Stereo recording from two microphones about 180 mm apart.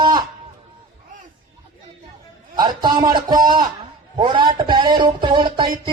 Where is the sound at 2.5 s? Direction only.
25° right (ahead or behind).